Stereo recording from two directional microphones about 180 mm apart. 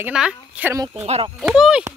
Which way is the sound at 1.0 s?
35° right (ahead or behind).